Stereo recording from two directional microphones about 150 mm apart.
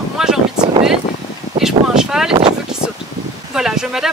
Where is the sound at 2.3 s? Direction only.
35° right (ahead or behind).